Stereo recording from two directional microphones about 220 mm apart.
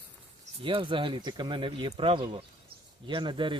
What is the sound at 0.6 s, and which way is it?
Speech, 20° right (ahead or behind).